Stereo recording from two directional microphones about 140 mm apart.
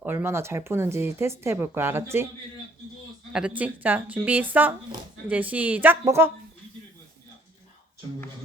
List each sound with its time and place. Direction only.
0.0 s speech: 15° right (ahead or behind)
3.3 s speech: 10° right (ahead or behind)